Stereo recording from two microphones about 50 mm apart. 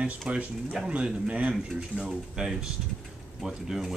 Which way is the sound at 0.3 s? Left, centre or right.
Right.